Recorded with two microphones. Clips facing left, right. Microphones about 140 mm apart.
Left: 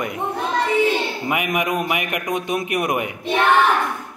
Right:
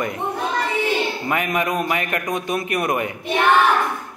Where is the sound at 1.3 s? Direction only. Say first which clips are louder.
Left 1 dB; 15° left (ahead or behind).